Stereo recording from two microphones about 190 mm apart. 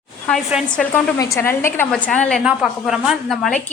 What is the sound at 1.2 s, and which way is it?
A woman's voice, 15° left (ahead or behind).